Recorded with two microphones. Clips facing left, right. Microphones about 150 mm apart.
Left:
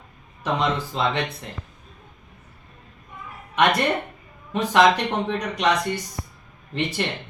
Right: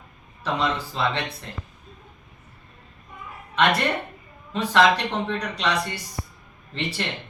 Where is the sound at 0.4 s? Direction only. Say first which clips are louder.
Left 2 dB; 20° left (ahead or behind).